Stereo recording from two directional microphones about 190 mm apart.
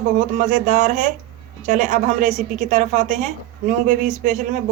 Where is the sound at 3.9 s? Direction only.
40° right (ahead or behind).